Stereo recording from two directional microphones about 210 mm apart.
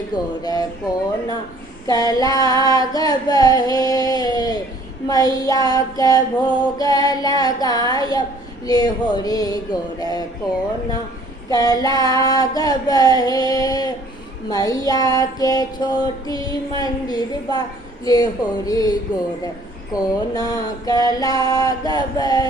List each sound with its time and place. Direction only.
0.1 s speech: 20° left (ahead or behind)
1.9 s singing: 15° left (ahead or behind)
5.0 s female singing: 15° left (ahead or behind)
10.0 s speech: 20° left (ahead or behind)
11.4 s female singing: 15° left (ahead or behind)